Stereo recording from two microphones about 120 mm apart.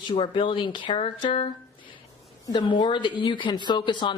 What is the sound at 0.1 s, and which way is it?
Speech, 45° left (ahead or behind).